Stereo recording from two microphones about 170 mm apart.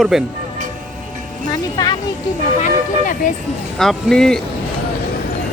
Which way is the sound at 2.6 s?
50° left (ahead or behind).